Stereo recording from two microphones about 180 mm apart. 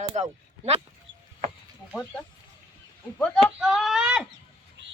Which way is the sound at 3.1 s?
Centre (ahead or behind).